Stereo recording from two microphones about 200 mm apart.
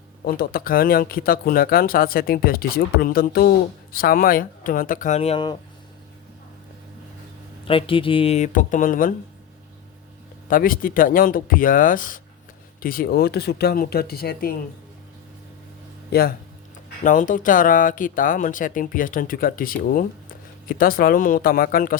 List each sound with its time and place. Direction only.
0.3 s speech: 50° left (ahead or behind); by 5.5 s 25° left (ahead or behind)
7.7 s speech: 25° left (ahead or behind); by 9.1 s 40° left (ahead or behind)
10.5 s speech: 45° left (ahead or behind)
17.0 s speech: 40° left (ahead or behind)